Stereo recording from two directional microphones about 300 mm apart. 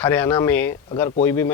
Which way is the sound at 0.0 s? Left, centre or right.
Centre.